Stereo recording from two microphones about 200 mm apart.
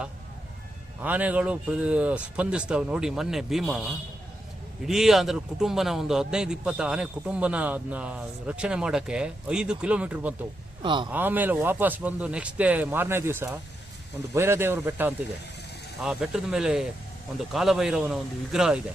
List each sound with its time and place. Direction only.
1.0 s a man's voice: 5° right (ahead or behind)
10.8 s speech: 25° right (ahead or behind)
11.1 s a man's voice: 10° right (ahead or behind)